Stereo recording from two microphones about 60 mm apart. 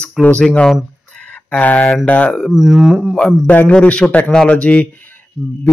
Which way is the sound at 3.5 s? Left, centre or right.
Left.